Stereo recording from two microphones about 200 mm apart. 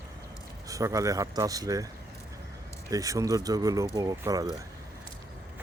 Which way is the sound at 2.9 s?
15° right (ahead or behind).